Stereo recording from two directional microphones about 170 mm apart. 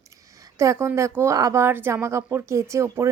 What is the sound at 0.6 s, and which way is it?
A woman's voice, 15° right (ahead or behind).